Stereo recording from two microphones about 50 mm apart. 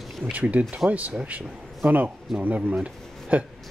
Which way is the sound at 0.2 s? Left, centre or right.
Right.